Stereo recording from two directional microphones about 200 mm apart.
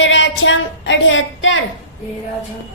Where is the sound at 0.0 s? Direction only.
70° left (ahead or behind).